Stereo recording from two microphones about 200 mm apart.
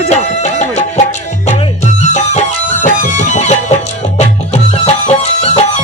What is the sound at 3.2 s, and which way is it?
Music, 35° left (ahead or behind).